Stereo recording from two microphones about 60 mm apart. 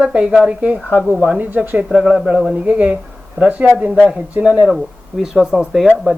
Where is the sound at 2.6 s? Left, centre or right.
Right.